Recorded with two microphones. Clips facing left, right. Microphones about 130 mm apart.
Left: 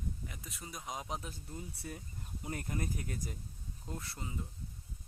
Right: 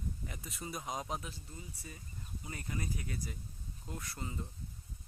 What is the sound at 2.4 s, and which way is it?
Speech, 50° left (ahead or behind).